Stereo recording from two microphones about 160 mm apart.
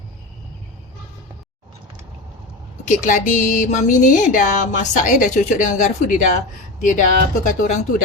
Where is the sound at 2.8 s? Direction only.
50° left (ahead or behind).